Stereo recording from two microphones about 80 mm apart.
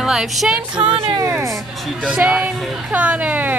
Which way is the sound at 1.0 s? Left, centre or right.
Right.